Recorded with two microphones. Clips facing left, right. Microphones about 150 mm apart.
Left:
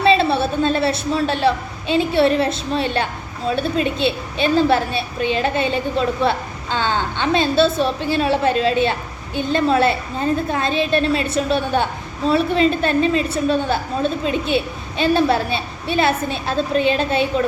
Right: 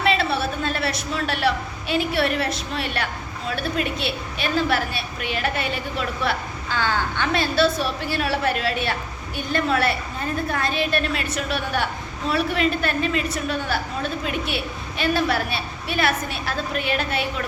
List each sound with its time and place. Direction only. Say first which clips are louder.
0.0 s a woman's voice: left 6 dB; 25° left (ahead or behind)